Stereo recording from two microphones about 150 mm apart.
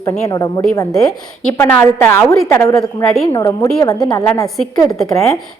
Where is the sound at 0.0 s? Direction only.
25° left (ahead or behind).